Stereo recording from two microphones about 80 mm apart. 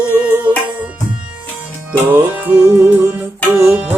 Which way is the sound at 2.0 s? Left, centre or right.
Right.